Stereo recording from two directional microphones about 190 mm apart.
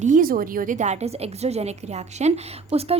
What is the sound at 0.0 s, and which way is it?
A woman's voice, 45° right (ahead or behind).